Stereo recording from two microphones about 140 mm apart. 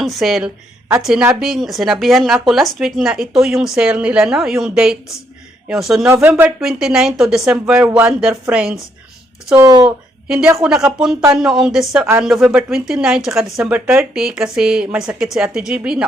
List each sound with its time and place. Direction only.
0.0 s speech: centre (ahead or behind)
6.2 s speech: 15° right (ahead or behind)
6.6 s speech: 5° right (ahead or behind)
9.6 s speech: 25° right (ahead or behind)
10.2 s speech: 5° right (ahead or behind)